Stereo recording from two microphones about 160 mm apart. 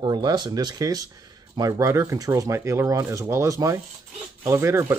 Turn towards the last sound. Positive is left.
turn(degrees=-15)  # may be behind; listen again after turning